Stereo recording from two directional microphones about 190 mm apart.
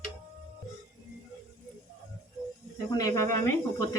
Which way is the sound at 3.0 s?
15° left (ahead or behind).